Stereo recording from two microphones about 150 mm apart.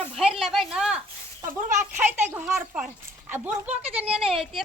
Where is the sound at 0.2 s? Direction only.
5° right (ahead or behind).